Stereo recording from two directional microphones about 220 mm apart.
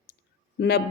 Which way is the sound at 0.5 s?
50° left (ahead or behind).